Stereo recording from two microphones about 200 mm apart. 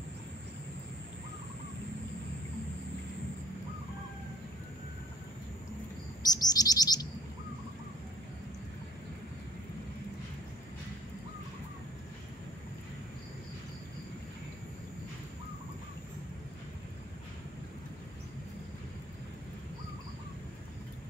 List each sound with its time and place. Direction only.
6.2 s chirp: 20° left (ahead or behind)